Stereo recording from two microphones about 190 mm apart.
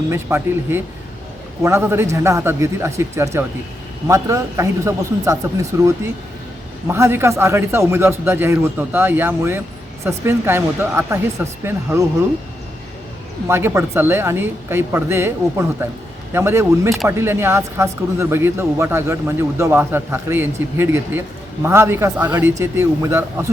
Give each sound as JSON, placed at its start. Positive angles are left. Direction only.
{"t": 0.1, "sound": "speech", "side_deg": -10}
{"t": 13.5, "sound": "speech", "side_deg": -15}